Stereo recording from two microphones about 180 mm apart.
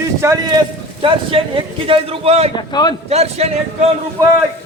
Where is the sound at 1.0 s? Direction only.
30° right (ahead or behind).